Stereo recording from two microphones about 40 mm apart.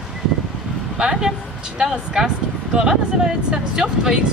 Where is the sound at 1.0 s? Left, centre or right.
Centre.